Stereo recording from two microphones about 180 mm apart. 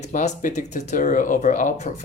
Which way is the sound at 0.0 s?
40° left (ahead or behind).